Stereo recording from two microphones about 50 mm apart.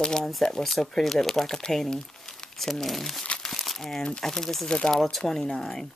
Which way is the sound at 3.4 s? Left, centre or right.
Centre.